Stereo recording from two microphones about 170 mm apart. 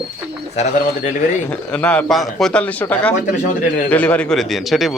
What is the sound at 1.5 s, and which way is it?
Speech, 10° left (ahead or behind).